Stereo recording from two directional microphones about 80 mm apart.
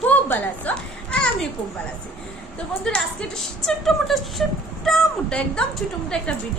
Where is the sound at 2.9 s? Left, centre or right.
Centre.